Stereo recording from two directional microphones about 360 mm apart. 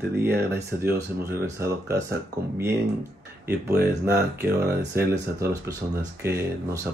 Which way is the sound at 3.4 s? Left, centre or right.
Centre.